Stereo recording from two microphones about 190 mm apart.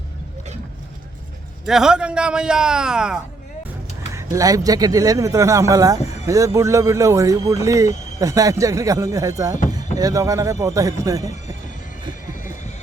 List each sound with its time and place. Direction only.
1.6 s a man's voice: centre (ahead or behind)
4.1 s a man's voice: 15° right (ahead or behind)
12.3 s a sound: 40° left (ahead or behind)